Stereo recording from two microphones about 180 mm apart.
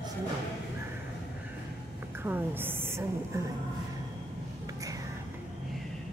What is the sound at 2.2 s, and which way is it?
A woman's voice, 10° right (ahead or behind).